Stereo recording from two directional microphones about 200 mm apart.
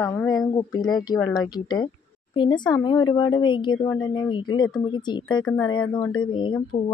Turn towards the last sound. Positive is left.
turn(degrees=25)  # may be behind; listen again after turning